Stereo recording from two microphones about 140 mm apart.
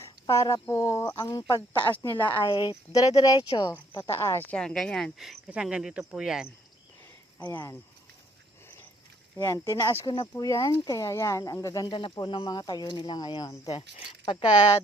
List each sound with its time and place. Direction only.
0.0 s a sound: 20° left (ahead or behind)
0.7 s speech: 20° left (ahead or behind)
1.1 s speech: 30° left (ahead or behind); by 6.5 s 5° right (ahead or behind)
7.3 s speech: 15° left (ahead or behind)
9.4 s speech: 25° left (ahead or behind)